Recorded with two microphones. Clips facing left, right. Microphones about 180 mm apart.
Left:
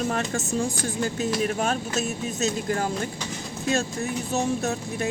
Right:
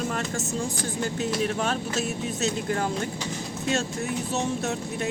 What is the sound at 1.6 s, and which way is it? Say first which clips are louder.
Speech: left 1 dB; 45° left (ahead or behind).